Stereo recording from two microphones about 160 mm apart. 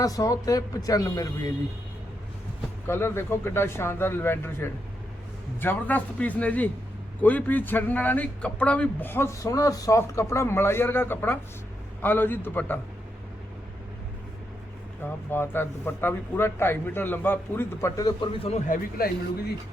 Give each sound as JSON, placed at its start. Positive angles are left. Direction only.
{"t": 0.0, "sound": "speech", "side_deg": 20}
{"t": 2.8, "sound": "a man's voice", "side_deg": 15}
{"t": 15.3, "sound": "a man's voice", "side_deg": 15}
{"t": 18.3, "sound": "a man's voice", "side_deg": 40}
{"t": 18.7, "sound": "a man's voice", "side_deg": 70}